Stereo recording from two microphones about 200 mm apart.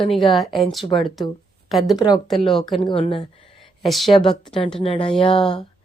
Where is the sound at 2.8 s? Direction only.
25° left (ahead or behind).